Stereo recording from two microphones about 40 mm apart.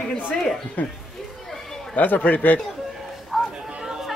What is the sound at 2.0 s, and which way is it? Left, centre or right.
Speech, left.